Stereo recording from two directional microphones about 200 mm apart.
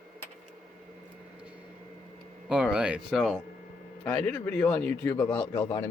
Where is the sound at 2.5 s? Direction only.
5° right (ahead or behind).